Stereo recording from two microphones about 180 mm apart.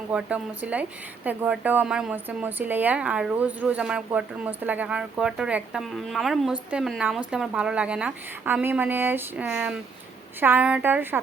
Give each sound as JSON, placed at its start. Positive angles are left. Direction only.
{"t": 0.1, "sound": "a woman's voice", "side_deg": -5}